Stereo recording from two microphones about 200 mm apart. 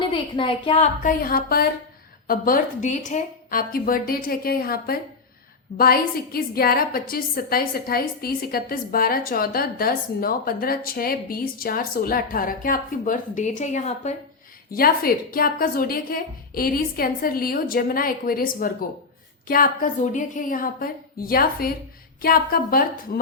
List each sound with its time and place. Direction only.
0.0 s a woman's voice: 25° left (ahead or behind)
1.0 s a woman's voice: 45° left (ahead or behind)
14.7 s a woman's voice: 45° left (ahead or behind)